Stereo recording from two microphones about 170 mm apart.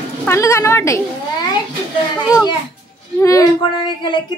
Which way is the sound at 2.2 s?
20° left (ahead or behind).